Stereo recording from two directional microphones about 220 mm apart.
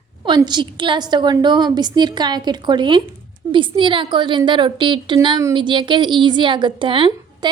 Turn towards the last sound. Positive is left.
turn(degrees=-20)  # may be behind; listen again after turning